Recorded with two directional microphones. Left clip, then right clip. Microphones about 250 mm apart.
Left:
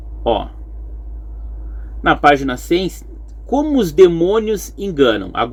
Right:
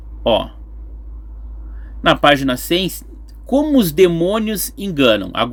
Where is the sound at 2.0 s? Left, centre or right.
Right.